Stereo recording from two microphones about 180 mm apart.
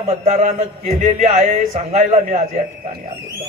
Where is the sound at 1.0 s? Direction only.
45° right (ahead or behind).